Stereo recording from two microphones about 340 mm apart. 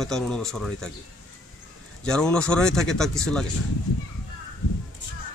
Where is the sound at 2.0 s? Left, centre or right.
Centre.